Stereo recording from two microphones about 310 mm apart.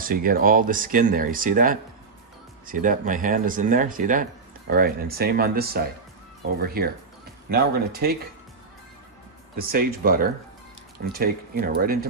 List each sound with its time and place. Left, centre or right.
0.0 s speech: right
9.6 s speech: right